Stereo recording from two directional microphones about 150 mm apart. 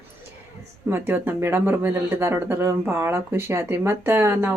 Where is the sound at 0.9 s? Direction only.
15° right (ahead or behind).